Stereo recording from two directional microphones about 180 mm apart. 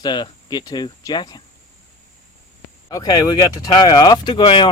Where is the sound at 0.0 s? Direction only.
25° left (ahead or behind).